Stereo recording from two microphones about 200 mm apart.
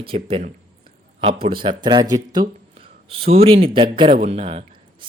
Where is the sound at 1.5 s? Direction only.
25° right (ahead or behind).